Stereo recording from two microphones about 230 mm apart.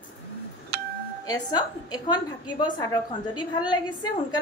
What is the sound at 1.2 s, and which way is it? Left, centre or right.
A woman's voice, centre.